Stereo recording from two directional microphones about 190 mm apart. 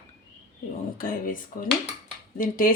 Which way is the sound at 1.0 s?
50° left (ahead or behind).